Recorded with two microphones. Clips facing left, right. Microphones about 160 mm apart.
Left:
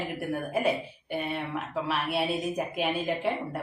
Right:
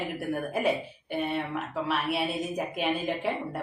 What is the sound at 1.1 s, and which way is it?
Speech, centre (ahead or behind).